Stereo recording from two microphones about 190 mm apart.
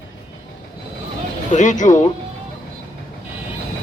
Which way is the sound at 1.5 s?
40° left (ahead or behind).